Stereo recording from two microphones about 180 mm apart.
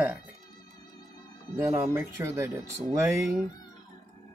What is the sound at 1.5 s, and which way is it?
Speech, 15° right (ahead or behind).